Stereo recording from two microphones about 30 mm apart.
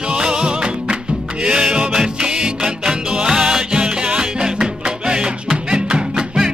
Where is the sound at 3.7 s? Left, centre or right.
Right.